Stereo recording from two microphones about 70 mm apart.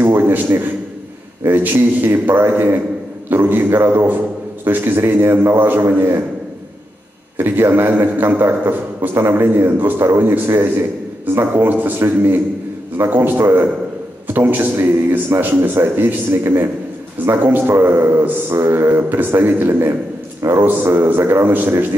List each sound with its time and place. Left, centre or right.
0.0 s a sound: right
1.4 s a man's voice: right
7.3 s a man's voice: right